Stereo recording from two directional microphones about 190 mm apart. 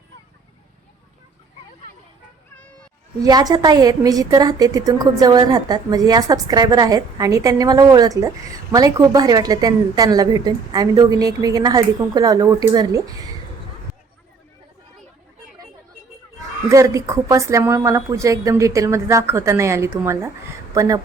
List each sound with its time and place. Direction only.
3.2 s a woman's voice: 20° right (ahead or behind)
16.6 s a woman's voice: 15° right (ahead or behind)